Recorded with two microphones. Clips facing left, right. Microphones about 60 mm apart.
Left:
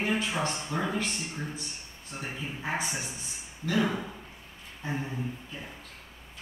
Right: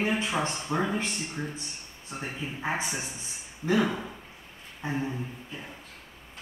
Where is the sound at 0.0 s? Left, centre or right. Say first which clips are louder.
Right 1 dB; right.